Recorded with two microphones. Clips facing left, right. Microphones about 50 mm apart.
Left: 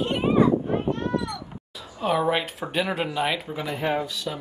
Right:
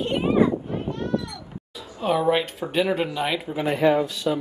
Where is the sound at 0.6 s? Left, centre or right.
Left.